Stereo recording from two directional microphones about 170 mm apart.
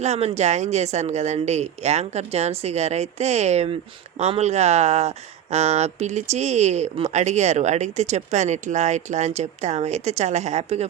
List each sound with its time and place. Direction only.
0.0 s speech: 40° right (ahead or behind)